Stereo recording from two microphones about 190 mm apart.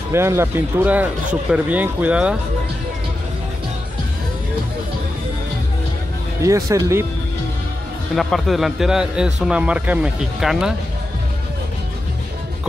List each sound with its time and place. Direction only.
0.1 s speech: 15° right (ahead or behind)
6.4 s speech: 15° right (ahead or behind)
8.2 s a man's voice: centre (ahead or behind)